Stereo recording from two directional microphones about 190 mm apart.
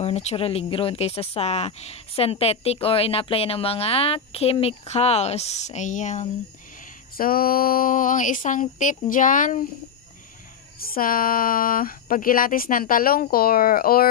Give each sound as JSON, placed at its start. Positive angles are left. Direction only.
{"t": 0.0, "sound": "speech", "side_deg": 35}
{"t": 7.2, "sound": "speech", "side_deg": 50}
{"t": 10.8, "sound": "speech", "side_deg": 50}